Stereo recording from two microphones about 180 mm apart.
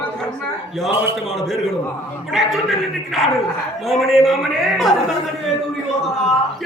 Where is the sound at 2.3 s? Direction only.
Centre (ahead or behind).